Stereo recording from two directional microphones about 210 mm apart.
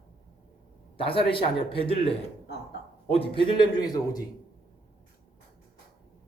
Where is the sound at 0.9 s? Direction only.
25° left (ahead or behind).